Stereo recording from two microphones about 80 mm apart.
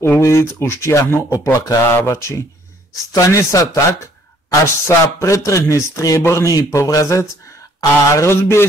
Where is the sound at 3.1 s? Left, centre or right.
Left.